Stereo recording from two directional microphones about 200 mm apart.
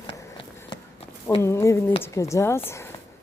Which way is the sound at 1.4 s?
15° left (ahead or behind).